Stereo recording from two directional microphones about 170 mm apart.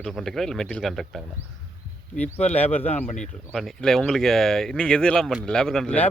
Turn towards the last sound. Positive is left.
turn(degrees=5)  # may be behind; listen again after turning